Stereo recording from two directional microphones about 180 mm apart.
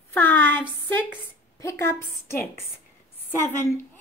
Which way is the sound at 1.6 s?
15° left (ahead or behind).